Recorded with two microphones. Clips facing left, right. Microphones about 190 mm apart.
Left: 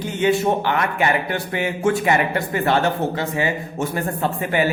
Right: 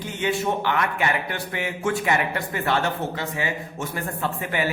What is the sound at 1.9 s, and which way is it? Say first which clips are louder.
Speech: left 3 dB; 20° left (ahead or behind).